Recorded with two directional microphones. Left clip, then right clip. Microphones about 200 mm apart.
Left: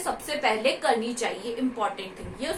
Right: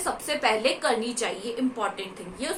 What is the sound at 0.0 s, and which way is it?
A woman's voice, 25° right (ahead or behind).